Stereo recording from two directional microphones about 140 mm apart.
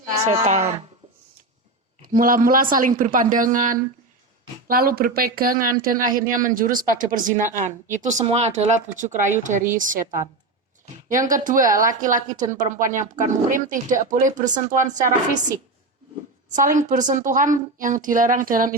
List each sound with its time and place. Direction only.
0.3 s speech: 55° right (ahead or behind)
2.1 s speech: 75° right (ahead or behind)
4.7 s speech: 90° right; by 15.1 s 65° right (ahead or behind)
16.6 s speech: 70° right (ahead or behind)